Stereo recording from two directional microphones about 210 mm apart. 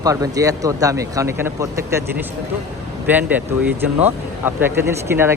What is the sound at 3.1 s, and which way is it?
A man's voice, 10° right (ahead or behind).